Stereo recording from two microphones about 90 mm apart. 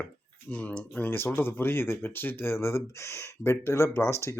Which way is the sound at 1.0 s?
25° left (ahead or behind).